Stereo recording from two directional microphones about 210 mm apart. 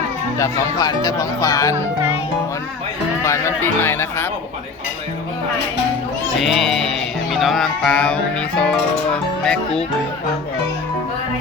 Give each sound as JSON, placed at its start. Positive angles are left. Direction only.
{"t": 0.3, "sound": "speech", "side_deg": 15}
{"t": 3.2, "sound": "speech", "side_deg": 15}
{"t": 6.4, "sound": "speech", "side_deg": 0}